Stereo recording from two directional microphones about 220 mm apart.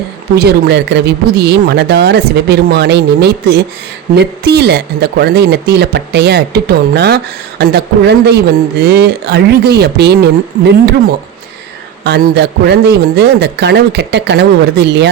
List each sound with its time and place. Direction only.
0.3 s speech: 50° right (ahead or behind)
12.0 s speech: 50° right (ahead or behind)